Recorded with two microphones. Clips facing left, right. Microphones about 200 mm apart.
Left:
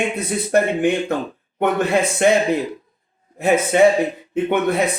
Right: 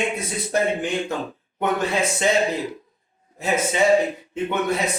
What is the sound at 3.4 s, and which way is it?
Speech, 60° left (ahead or behind).